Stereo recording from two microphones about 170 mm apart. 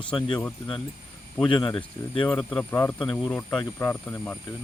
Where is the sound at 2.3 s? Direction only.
5° left (ahead or behind).